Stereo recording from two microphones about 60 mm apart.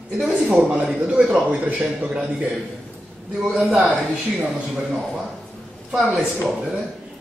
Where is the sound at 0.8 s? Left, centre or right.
Centre.